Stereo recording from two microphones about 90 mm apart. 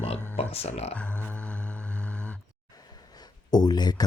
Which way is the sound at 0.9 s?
15° left (ahead or behind).